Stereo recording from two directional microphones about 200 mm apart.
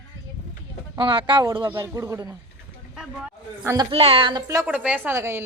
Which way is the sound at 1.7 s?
15° right (ahead or behind).